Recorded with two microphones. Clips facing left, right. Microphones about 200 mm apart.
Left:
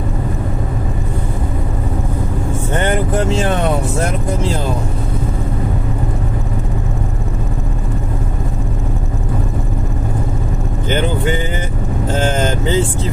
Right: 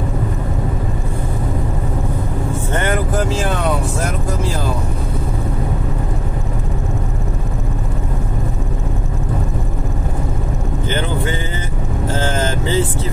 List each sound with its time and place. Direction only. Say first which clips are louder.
10.9 s speech: left 5 dB; 20° left (ahead or behind)